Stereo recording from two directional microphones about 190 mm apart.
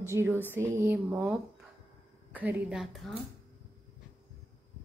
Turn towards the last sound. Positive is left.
turn(degrees=0)  # may be behind; listen again after turning